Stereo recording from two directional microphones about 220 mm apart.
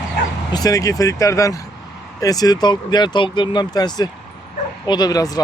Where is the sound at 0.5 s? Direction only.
15° left (ahead or behind).